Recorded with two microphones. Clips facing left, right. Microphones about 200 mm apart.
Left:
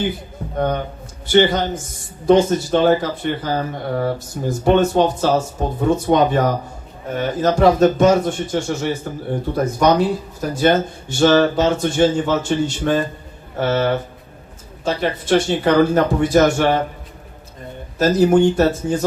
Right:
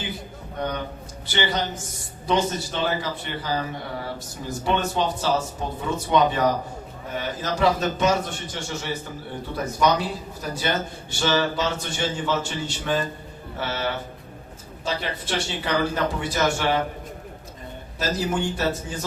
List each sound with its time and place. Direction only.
1.3 s speech: 50° left (ahead or behind)
18.0 s speech: 50° left (ahead or behind)